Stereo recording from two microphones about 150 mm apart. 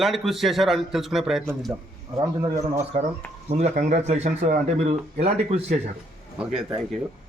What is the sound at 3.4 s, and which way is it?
Speech, 45° right (ahead or behind).